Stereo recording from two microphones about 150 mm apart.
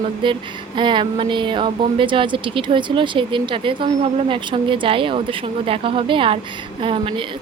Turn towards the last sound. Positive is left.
turn(degrees=-35)  # may be behind; listen again after turning